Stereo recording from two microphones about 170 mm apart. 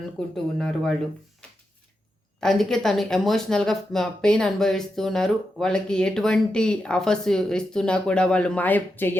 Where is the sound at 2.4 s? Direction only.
Centre (ahead or behind).